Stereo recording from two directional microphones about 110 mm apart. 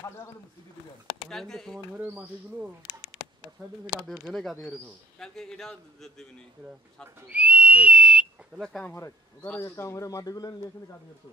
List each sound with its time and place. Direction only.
1.3 s a man's voice: 5° left (ahead or behind)
2.0 s a man's voice: 10° right (ahead or behind); by 6.2 s 5° left (ahead or behind)
7.2 s speech: 15° right (ahead or behind)
8.6 s a man's voice: 5° left (ahead or behind)
9.6 s speech: 25° left (ahead or behind)